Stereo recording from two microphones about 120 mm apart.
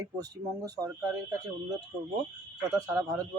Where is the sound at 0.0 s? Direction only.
30° right (ahead or behind).